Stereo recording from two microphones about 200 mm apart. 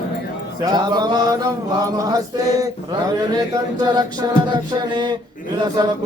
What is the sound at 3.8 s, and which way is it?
Music, 20° right (ahead or behind).